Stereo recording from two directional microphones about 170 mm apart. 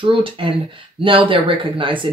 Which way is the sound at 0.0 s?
30° right (ahead or behind).